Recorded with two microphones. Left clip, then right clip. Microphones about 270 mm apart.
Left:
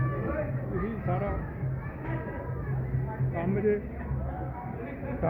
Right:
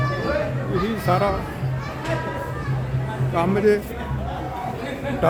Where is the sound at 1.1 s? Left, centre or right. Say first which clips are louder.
Right 13 dB; right.